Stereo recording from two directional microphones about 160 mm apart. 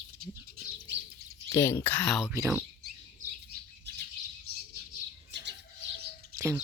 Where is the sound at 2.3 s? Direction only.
15° right (ahead or behind).